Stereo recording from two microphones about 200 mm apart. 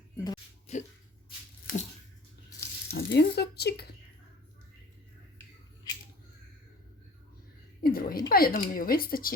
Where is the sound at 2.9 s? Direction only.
55° left (ahead or behind).